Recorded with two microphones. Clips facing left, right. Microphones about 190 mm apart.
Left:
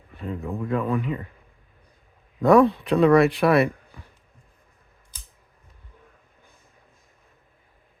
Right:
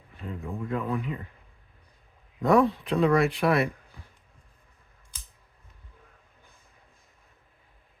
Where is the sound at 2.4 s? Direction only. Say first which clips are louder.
Left 5 dB; 70° left (ahead or behind).